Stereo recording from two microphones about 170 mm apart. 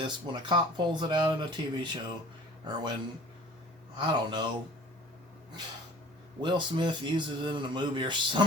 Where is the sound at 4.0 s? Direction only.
30° right (ahead or behind).